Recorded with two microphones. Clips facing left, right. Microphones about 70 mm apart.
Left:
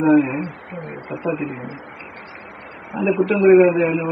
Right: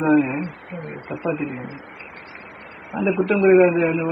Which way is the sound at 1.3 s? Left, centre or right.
Left.